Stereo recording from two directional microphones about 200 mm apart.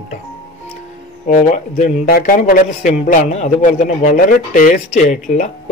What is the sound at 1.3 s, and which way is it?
A man's voice, 40° left (ahead or behind).